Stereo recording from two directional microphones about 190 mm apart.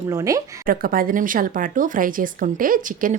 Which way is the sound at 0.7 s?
50° right (ahead or behind).